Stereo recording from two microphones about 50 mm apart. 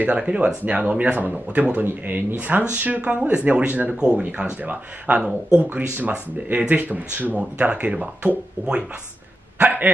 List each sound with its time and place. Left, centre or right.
0.0 s speech: right
3.9 s speech: centre
4.2 s speech: right
9.6 s speech: right